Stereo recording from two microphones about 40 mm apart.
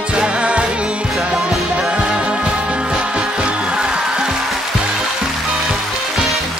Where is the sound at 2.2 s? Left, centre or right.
Right.